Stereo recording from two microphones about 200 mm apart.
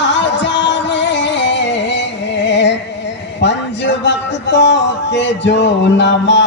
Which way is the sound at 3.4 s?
60° left (ahead or behind).